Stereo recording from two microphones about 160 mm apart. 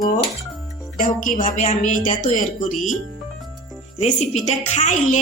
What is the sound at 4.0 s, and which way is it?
Speech, 45° left (ahead or behind).